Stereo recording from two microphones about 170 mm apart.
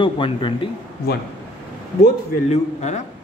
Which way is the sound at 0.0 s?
30° left (ahead or behind).